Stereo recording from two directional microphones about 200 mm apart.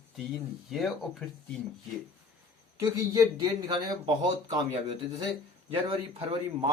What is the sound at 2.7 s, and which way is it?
Speech, 15° right (ahead or behind).